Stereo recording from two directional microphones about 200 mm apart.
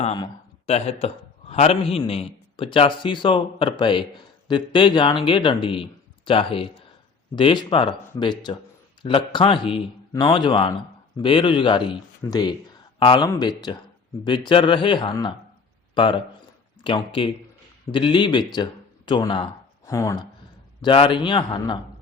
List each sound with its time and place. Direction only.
0.0 s a man's voice: 30° left (ahead or behind)
20.8 s a man's voice: 25° left (ahead or behind)